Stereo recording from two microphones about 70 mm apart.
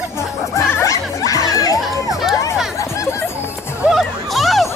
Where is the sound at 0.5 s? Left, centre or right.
Left.